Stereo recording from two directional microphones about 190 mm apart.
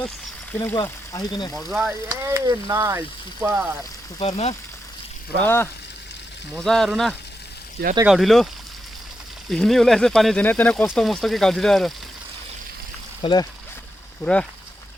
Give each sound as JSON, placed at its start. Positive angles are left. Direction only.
{"t": 0.6, "sound": "speech", "side_deg": 20}
{"t": 1.5, "sound": "speech", "side_deg": 0}
{"t": 2.0, "sound": "speech", "side_deg": -20}
{"t": 4.2, "sound": "speech", "side_deg": 35}
{"t": 5.4, "sound": "speech", "side_deg": 10}
{"t": 6.5, "sound": "speech", "side_deg": 0}
{"t": 9.5, "sound": "speech", "side_deg": 0}
{"t": 13.2, "sound": "speech", "side_deg": 20}